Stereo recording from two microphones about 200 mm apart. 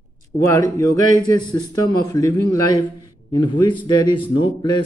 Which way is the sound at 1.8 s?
15° left (ahead or behind).